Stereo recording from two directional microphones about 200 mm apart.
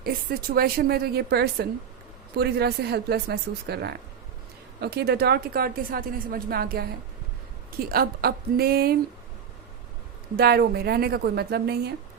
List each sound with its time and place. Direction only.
0.0 s speech: 50° right (ahead or behind)
10.3 s speech: 50° right (ahead or behind)